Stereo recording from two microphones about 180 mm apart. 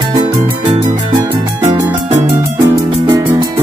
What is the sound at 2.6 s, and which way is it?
Music, 20° right (ahead or behind).